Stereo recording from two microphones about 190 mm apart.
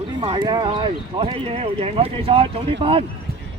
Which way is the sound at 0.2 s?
25° right (ahead or behind).